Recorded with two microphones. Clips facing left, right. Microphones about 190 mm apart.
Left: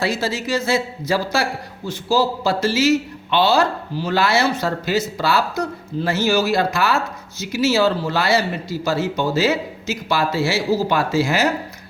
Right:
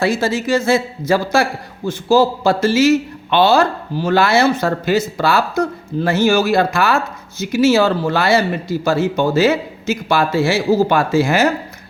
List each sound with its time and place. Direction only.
0.0 s a man's voice: 50° right (ahead or behind)